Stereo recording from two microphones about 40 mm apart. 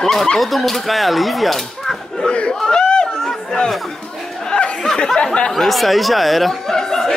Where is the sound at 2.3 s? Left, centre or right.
Left.